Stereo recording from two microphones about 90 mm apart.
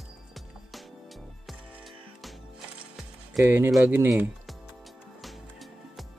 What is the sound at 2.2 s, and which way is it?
Music, centre (ahead or behind).